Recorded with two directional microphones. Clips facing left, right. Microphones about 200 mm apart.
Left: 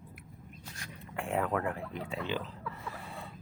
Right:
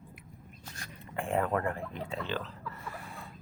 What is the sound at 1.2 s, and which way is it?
Speech, centre (ahead or behind).